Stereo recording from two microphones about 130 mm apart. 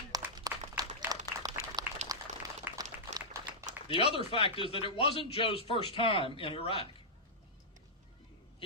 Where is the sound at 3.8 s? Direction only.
45° left (ahead or behind).